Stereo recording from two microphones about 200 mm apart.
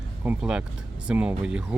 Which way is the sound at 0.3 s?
5° right (ahead or behind).